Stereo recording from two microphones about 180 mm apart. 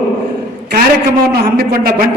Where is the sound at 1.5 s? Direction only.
55° right (ahead or behind).